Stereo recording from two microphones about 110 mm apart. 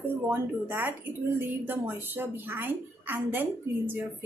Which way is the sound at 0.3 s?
20° right (ahead or behind).